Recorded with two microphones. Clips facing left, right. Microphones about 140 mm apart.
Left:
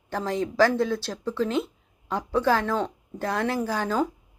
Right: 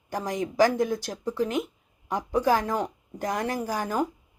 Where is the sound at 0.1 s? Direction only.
15° right (ahead or behind).